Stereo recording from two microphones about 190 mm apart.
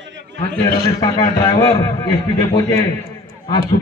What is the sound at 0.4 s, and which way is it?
A man's voice, 20° left (ahead or behind).